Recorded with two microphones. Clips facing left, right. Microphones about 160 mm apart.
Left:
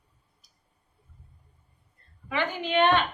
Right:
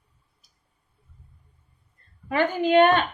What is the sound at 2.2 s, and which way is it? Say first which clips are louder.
Speech: right 7 dB; 45° right (ahead or behind).